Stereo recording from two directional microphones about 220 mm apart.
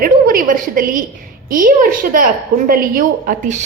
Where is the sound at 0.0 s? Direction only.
40° right (ahead or behind).